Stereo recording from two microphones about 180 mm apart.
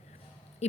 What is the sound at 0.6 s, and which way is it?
Speech, 35° left (ahead or behind).